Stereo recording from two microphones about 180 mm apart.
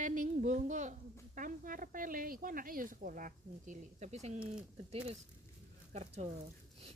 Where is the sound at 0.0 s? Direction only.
45° right (ahead or behind).